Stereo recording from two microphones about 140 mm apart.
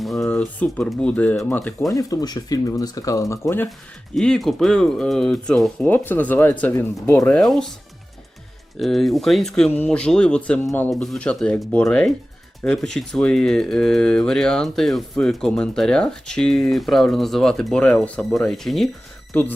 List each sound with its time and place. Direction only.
0.0 s speech: centre (ahead or behind)
1.9 s speech: 25° left (ahead or behind)
4.1 s speech: 5° left (ahead or behind)
8.8 s speech: centre (ahead or behind)